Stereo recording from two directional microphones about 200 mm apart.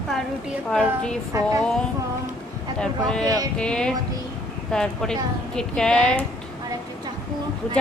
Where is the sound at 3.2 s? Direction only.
20° right (ahead or behind).